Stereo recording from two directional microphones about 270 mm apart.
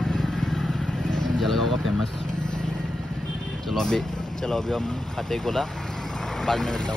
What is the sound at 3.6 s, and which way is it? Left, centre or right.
Speech, centre.